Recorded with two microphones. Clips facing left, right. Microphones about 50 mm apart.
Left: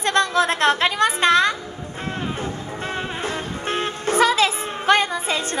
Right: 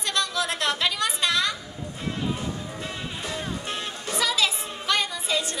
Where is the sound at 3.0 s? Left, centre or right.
Left.